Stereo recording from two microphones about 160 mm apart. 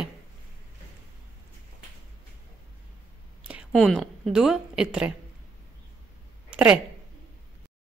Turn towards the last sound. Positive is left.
turn(degrees=-10)  # may be behind; listen again after turning